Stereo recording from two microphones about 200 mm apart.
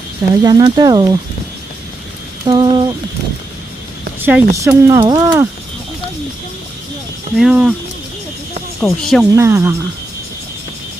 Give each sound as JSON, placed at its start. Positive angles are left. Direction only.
{"t": 0.4, "sound": "speech", "side_deg": -20}
{"t": 2.4, "sound": "speech", "side_deg": -20}
{"t": 4.2, "sound": "speech", "side_deg": -10}
{"t": 7.3, "sound": "speech", "side_deg": 0}
{"t": 8.8, "sound": "speech", "side_deg": 0}
{"t": 9.3, "sound": "speech", "side_deg": -10}